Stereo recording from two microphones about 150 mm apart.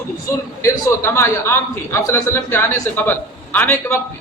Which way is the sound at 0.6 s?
20° left (ahead or behind).